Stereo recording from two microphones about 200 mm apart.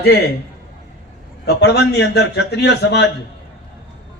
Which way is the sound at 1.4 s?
55° left (ahead or behind).